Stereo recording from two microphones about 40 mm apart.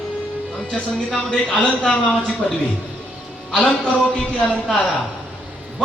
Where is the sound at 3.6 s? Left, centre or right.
Left.